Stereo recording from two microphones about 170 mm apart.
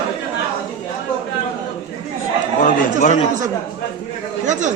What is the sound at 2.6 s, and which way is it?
Chatter, 45° left (ahead or behind).